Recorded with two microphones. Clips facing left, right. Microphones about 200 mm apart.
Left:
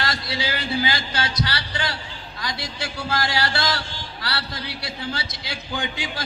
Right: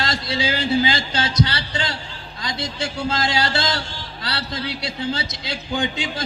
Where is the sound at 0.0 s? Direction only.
25° right (ahead or behind).